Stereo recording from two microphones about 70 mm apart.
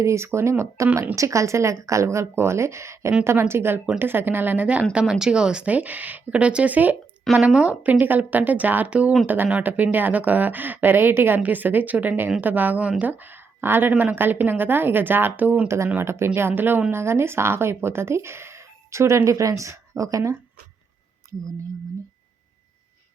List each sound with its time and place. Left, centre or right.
0.0 s speech: right
15.6 s speech: right